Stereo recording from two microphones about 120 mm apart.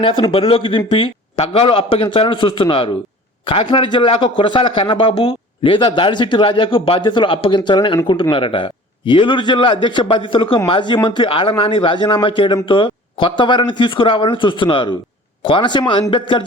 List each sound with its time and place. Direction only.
0.0 s a man's voice: 50° left (ahead or behind)